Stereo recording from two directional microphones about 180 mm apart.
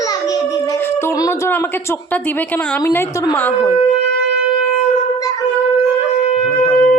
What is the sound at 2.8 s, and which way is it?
Speech, 15° left (ahead or behind).